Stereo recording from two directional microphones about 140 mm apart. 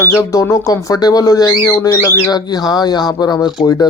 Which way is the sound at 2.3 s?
30° left (ahead or behind).